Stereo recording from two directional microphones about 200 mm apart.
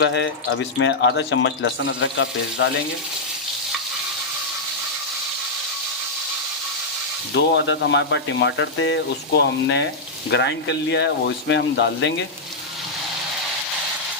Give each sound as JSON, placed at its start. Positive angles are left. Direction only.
{"t": 0.0, "sound": "speech", "side_deg": 65}
{"t": 7.3, "sound": "speech", "side_deg": 60}